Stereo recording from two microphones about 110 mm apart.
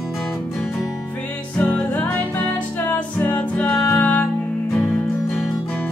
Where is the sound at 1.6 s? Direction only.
15° left (ahead or behind).